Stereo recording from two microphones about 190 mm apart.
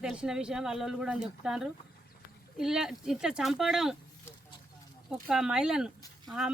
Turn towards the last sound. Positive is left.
turn(degrees=-5)  # may be behind; listen again after turning